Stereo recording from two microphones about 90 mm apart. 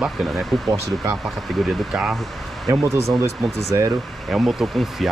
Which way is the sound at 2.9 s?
35° right (ahead or behind).